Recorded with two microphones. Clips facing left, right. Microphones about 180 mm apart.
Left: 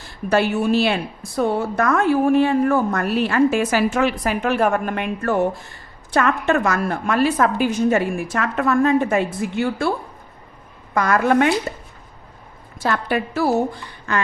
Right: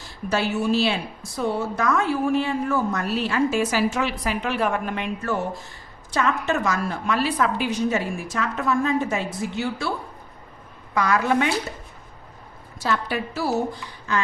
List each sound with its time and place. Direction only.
0.0 s speech: 55° left (ahead or behind)
10.9 s a woman's voice: 50° left (ahead or behind)
12.8 s speech: 55° left (ahead or behind)